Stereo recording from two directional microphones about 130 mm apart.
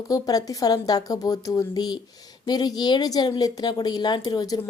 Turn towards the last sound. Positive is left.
turn(degrees=30)  # may be behind; listen again after turning